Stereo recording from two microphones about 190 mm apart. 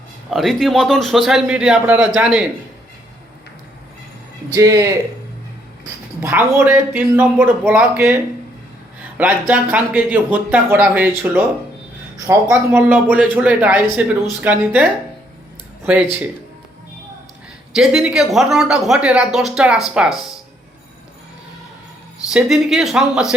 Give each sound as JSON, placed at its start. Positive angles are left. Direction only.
{"t": 0.3, "sound": "speech", "side_deg": 0}
{"t": 4.5, "sound": "speech", "side_deg": -20}
{"t": 6.1, "sound": "speech", "side_deg": -10}
{"t": 17.7, "sound": "speech", "side_deg": -5}
{"t": 22.3, "sound": "speech", "side_deg": -5}